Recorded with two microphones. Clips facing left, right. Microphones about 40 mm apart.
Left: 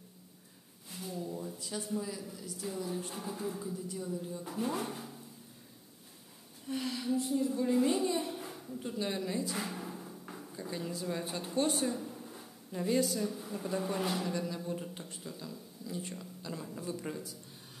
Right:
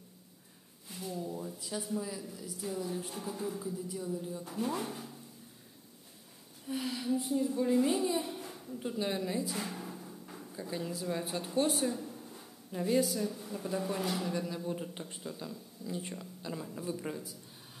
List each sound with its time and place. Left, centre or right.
0.8 s a woman's voice: centre
6.6 s a woman's voice: centre
8.7 s a sound: centre
10.5 s speech: centre
16.2 s speech: centre